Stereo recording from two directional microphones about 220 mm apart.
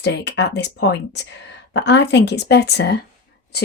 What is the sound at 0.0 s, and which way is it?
Speech, 50° left (ahead or behind).